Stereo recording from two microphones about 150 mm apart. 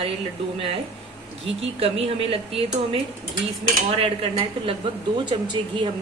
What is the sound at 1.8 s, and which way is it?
A woman's voice, 40° right (ahead or behind).